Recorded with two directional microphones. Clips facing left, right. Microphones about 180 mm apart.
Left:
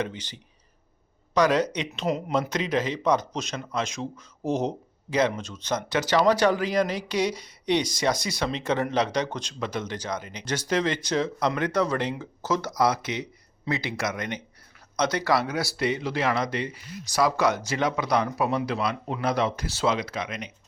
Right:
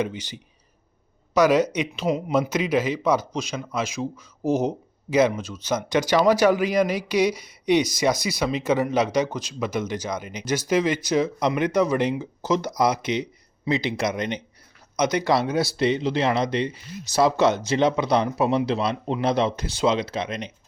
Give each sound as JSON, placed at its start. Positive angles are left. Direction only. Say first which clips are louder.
{"t": 0.0, "sound": "a man's voice", "louder": "right 4 dB", "side_deg": -10}